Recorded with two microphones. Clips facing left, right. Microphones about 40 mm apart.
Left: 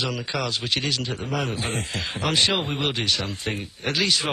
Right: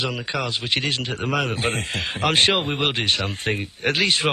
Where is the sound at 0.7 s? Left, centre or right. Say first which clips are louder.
Right 2 dB; right.